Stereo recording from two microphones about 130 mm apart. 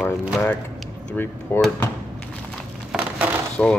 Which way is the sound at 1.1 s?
15° left (ahead or behind).